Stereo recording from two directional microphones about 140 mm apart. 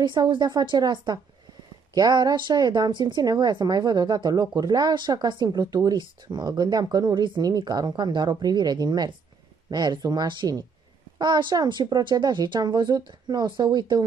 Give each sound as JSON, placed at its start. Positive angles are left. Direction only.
{"t": 0.0, "sound": "a woman's voice", "side_deg": -35}